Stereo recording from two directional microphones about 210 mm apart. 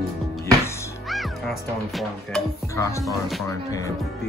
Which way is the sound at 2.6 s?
15° left (ahead or behind).